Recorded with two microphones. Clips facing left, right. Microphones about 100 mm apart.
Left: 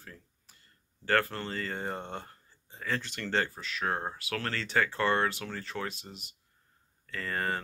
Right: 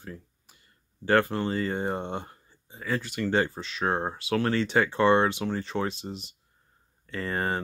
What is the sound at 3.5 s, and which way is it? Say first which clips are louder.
Speech: right 5 dB; 25° right (ahead or behind).